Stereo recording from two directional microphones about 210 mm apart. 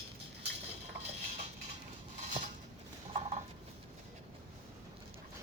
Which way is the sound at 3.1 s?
35° right (ahead or behind).